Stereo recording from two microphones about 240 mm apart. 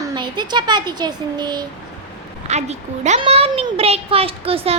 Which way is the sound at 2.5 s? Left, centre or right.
Right.